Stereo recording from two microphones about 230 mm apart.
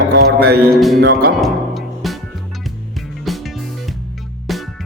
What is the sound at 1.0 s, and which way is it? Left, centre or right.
Speech, right.